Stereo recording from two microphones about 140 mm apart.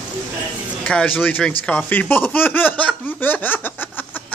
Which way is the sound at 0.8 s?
10° left (ahead or behind).